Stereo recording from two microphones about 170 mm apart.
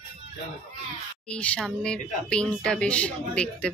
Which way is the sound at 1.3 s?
5° left (ahead or behind).